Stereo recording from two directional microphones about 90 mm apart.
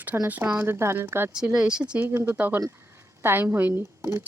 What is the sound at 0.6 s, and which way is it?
Speech, 30° right (ahead or behind).